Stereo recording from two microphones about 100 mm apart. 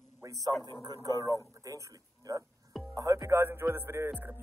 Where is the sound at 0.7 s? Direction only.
50° right (ahead or behind).